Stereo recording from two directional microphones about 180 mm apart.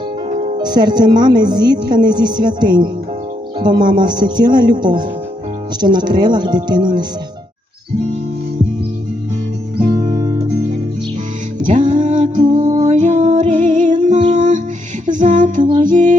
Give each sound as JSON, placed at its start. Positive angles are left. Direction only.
{"t": 0.3, "sound": "music", "side_deg": -40}
{"t": 0.5, "sound": "a woman's voice", "side_deg": -25}
{"t": 9.7, "sound": "music", "side_deg": -25}
{"t": 11.7, "sound": "music", "side_deg": -45}